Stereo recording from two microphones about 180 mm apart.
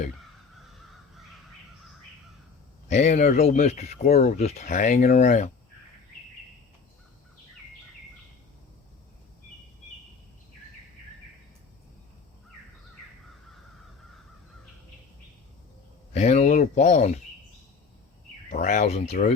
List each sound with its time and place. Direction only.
2.9 s speech: 40° left (ahead or behind)
16.1 s speech: 40° left (ahead or behind)
18.5 s speech: 40° left (ahead or behind)